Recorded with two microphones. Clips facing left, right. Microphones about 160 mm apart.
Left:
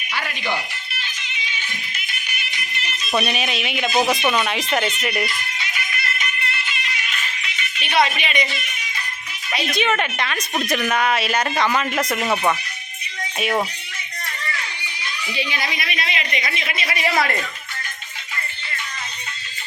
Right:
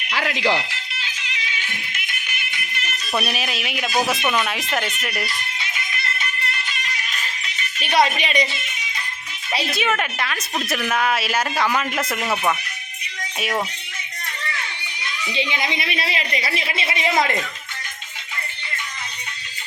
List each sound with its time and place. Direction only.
0.1 s music: 90° right
3.1 s speech: 5° right (ahead or behind)
5.2 s music: 25° right (ahead or behind)
9.5 s speech: 30° right (ahead or behind)
9.7 s speech: 5° right (ahead or behind)
13.4 s speech: centre (ahead or behind)
15.3 s speech: 20° right (ahead or behind)